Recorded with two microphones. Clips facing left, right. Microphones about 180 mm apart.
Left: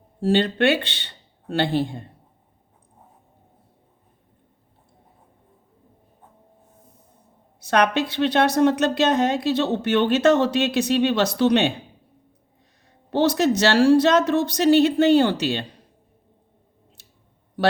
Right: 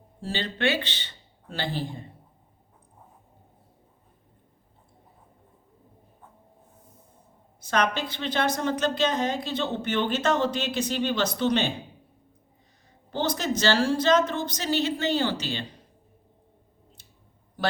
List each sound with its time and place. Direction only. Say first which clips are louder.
0.2 s a woman's voice: left 10 dB; 65° left (ahead or behind)
7.6 s a woman's voice: left 6 dB; 70° left (ahead or behind)
13.1 s a woman's voice: left 8 dB; 70° left (ahead or behind)